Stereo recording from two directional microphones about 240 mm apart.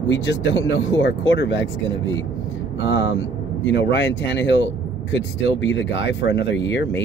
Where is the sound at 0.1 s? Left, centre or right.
Left.